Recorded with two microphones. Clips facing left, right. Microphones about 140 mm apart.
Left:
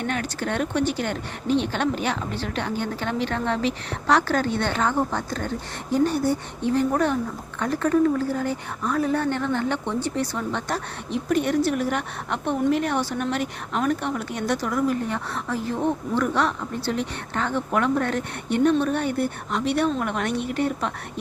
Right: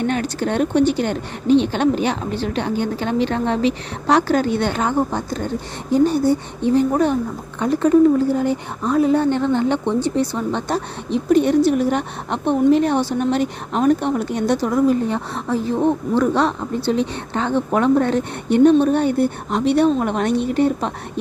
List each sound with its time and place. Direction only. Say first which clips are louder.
0.0 s a woman's voice: right 6 dB; 25° right (ahead or behind)